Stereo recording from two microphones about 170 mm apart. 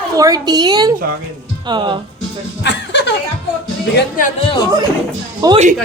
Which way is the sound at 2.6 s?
90° left.